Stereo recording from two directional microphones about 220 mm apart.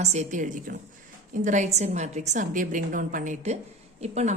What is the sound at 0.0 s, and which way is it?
A woman's voice, 30° right (ahead or behind).